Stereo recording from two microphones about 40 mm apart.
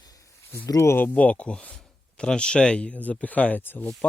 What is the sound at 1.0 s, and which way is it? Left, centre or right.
Speech, left.